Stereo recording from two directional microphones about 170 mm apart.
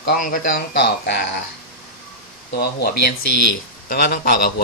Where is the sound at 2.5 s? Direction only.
70° left (ahead or behind).